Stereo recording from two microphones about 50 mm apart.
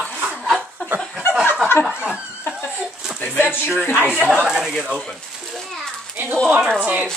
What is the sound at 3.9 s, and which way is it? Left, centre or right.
Speech, left.